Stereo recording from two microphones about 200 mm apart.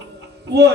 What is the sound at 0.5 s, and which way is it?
Child singing, 55° right (ahead or behind).